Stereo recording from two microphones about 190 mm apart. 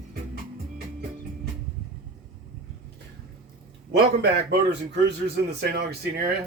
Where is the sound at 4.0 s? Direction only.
60° right (ahead or behind).